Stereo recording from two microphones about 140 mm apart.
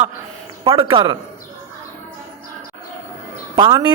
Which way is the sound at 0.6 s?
35° right (ahead or behind).